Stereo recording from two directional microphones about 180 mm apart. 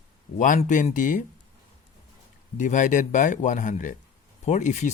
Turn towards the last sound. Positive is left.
turn(degrees=40)  # may be behind; listen again after turning